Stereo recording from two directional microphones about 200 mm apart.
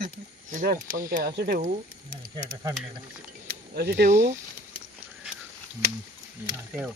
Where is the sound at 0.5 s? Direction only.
45° right (ahead or behind).